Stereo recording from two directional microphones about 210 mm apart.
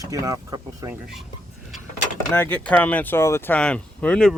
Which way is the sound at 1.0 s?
Centre (ahead or behind).